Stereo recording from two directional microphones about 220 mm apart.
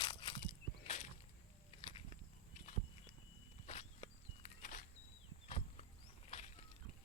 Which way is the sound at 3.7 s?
30° left (ahead or behind).